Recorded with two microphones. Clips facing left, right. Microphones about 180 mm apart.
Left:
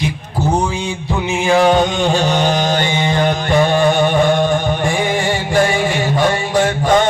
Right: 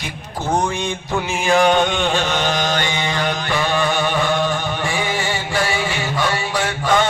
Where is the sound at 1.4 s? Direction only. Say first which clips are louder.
Left 3 dB; 25° left (ahead or behind).